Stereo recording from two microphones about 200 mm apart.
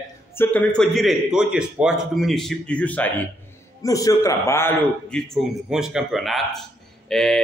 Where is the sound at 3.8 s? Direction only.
15° left (ahead or behind).